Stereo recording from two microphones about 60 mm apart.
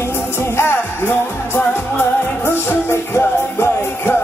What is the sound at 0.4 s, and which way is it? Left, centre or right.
Music, left.